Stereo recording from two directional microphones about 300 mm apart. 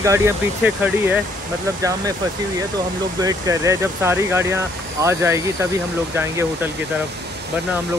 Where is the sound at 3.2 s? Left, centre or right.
Centre.